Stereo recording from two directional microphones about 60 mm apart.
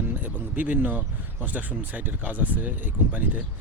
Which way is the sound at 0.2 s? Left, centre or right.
Right.